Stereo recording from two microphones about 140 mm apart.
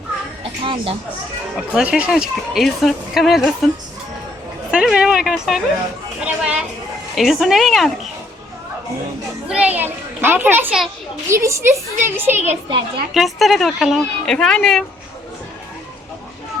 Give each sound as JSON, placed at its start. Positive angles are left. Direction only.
{"t": 0.6, "sound": "speech", "side_deg": -40}
{"t": 1.7, "sound": "speech", "side_deg": -5}
{"t": 4.7, "sound": "a child's voice", "side_deg": -5}
{"t": 9.5, "sound": "a child's voice", "side_deg": -10}
{"t": 13.1, "sound": "speech", "side_deg": 0}